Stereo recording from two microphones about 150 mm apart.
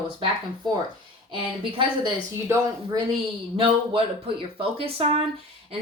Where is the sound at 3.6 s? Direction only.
40° right (ahead or behind).